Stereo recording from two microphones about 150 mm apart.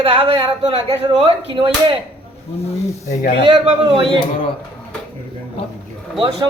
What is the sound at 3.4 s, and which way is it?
Speech, 35° right (ahead or behind).